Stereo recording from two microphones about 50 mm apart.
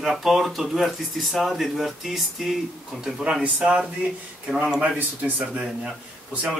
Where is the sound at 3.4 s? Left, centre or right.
Right.